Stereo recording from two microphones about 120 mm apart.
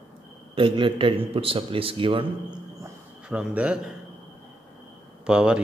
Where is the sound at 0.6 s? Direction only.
45° right (ahead or behind).